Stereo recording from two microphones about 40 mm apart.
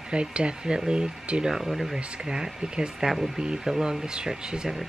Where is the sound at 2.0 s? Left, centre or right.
Centre.